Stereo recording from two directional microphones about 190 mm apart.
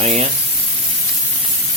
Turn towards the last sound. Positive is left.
turn(degrees=-35)  # may be behind; listen again after turning